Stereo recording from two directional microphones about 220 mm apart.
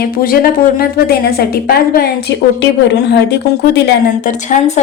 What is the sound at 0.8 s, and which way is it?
A woman's voice, 45° left (ahead or behind).